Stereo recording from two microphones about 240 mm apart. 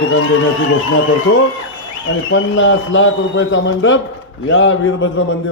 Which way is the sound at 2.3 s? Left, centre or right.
Left.